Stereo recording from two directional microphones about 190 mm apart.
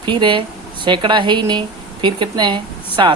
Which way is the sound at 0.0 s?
25° right (ahead or behind).